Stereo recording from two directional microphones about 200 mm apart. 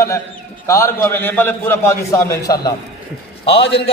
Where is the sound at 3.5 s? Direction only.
25° left (ahead or behind).